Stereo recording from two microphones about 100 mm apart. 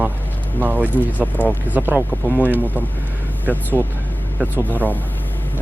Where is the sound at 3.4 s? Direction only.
20° right (ahead or behind).